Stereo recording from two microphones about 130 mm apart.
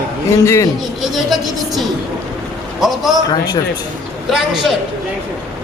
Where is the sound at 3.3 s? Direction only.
30° left (ahead or behind).